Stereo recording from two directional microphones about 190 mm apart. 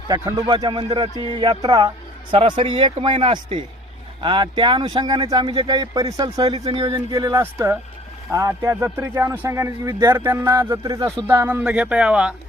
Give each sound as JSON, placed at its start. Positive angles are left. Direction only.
{"t": 0.1, "sound": "speech", "side_deg": -20}